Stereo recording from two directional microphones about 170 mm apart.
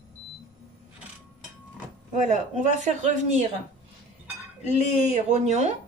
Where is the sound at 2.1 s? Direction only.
45° right (ahead or behind).